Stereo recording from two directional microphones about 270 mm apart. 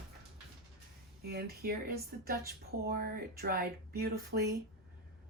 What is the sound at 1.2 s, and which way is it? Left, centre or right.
A woman's voice, right.